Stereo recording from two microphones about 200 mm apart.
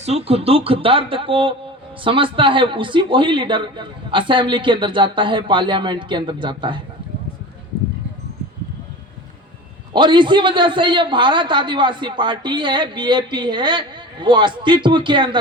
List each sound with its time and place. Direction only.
0.0 s a man's voice: 30° right (ahead or behind)
9.9 s a man's voice: 25° right (ahead or behind)